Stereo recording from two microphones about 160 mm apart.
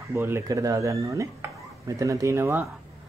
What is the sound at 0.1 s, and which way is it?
Speech, 15° right (ahead or behind).